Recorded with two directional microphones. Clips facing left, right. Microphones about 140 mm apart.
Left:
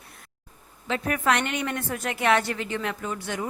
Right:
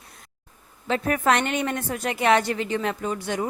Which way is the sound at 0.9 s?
35° right (ahead or behind).